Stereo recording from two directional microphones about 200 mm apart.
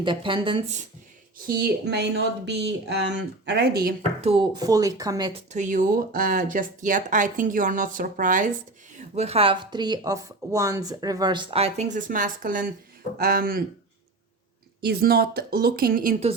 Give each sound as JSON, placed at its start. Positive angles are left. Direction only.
{"t": 0.0, "sound": "speech", "side_deg": -25}
{"t": 1.5, "sound": "speech", "side_deg": -50}
{"t": 4.2, "sound": "speech", "side_deg": -25}
{"t": 5.5, "sound": "speech", "side_deg": -40}
{"t": 14.8, "sound": "speech", "side_deg": -50}